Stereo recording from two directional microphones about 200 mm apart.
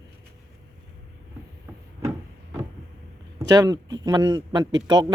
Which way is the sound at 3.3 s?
20° right (ahead or behind).